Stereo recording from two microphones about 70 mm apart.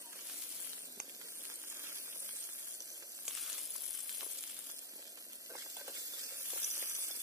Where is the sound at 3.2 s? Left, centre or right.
Centre.